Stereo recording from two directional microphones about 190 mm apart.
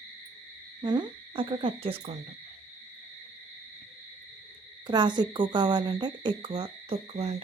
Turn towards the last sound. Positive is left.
turn(degrees=-35)  # may be behind; listen again after turning